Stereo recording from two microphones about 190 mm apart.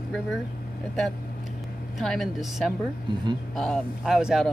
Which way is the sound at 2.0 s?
Centre (ahead or behind).